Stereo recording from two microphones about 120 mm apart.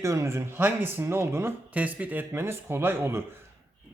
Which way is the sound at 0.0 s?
25° right (ahead or behind).